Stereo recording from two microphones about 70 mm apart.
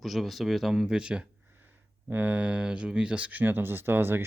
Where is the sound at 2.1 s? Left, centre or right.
Right.